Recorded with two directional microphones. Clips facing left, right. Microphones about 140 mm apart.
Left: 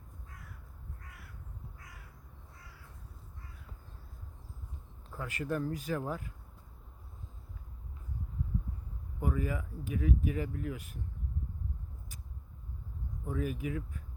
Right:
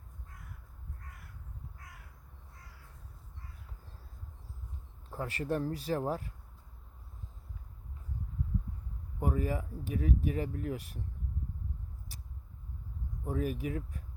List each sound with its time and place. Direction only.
5.1 s speech: 35° right (ahead or behind)
9.2 s speech: 35° right (ahead or behind)
13.2 s speech: 35° right (ahead or behind)